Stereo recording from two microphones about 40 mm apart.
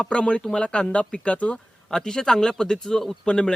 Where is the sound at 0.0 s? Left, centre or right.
Left.